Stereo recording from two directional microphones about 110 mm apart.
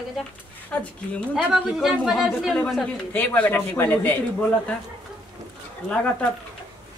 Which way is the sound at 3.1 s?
15° left (ahead or behind).